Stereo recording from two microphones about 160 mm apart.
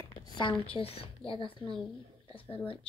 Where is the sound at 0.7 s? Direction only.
35° left (ahead or behind).